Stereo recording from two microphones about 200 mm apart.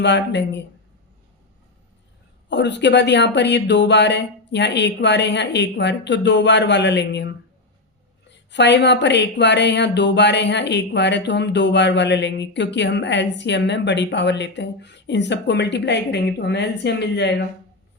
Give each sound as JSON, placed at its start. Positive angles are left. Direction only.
{"t": 0.0, "sound": "speech", "side_deg": 60}
{"t": 2.5, "sound": "speech", "side_deg": 60}